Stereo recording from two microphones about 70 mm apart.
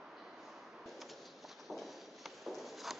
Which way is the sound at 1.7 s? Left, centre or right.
Centre.